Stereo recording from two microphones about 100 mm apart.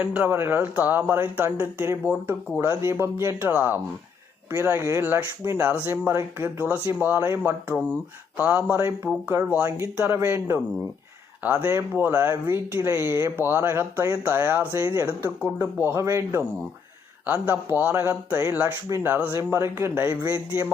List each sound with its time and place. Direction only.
0.0 s speech: 20° right (ahead or behind)
11.4 s speech: 15° right (ahead or behind)